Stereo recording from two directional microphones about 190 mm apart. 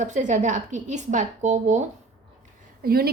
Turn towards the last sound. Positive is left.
turn(degrees=-55)  # may be behind; listen again after turning